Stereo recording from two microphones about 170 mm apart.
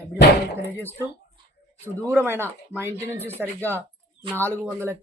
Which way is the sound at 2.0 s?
15° right (ahead or behind).